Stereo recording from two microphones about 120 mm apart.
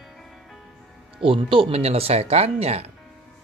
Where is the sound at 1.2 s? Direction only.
50° right (ahead or behind).